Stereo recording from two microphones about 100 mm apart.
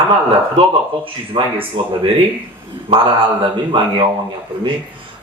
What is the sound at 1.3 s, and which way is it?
A man's voice, 60° right (ahead or behind).